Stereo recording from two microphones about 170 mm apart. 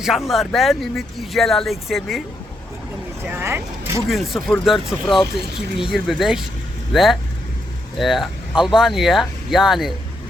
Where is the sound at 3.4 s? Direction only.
15° right (ahead or behind).